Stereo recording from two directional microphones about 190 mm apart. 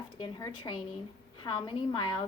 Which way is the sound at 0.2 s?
20° left (ahead or behind).